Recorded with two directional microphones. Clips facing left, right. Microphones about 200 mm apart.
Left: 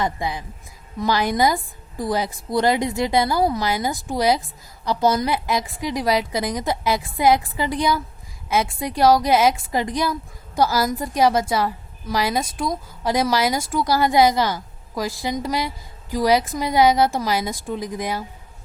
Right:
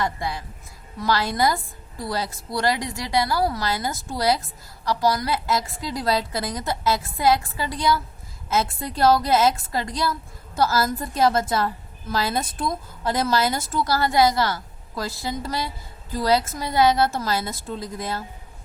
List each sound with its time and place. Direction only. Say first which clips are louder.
0.0 s a woman's voice: left 2 dB; 20° left (ahead or behind)